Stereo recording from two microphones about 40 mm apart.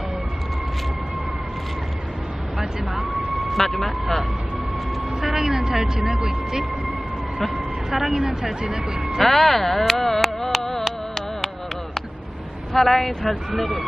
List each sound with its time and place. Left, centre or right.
3.5 s speech: centre
5.2 s speech: centre
9.2 s speech: centre
12.7 s speech: centre